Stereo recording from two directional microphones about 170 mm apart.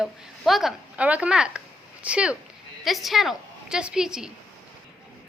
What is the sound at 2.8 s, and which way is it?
A woman's voice, centre (ahead or behind).